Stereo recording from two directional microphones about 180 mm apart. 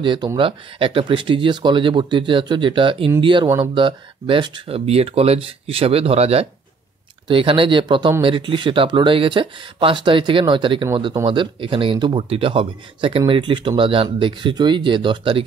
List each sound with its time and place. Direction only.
0.0 s speech: 25° right (ahead or behind)